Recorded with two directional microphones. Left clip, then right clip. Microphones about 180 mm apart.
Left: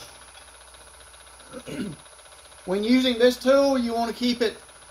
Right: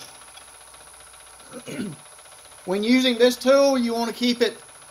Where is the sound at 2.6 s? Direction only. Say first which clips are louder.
Right 2 dB; 55° right (ahead or behind).